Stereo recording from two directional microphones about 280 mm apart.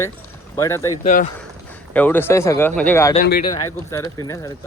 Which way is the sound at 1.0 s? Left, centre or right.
Left.